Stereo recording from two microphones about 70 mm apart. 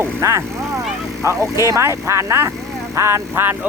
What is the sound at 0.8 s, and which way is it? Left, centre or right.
Vehicle, centre.